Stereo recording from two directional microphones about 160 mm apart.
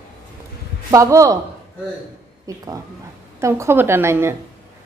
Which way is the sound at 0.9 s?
20° right (ahead or behind).